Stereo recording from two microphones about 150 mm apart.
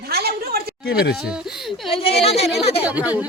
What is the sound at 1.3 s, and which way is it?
Speech, 5° right (ahead or behind).